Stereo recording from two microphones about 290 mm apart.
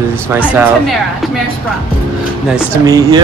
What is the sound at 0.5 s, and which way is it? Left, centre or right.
Speech, centre.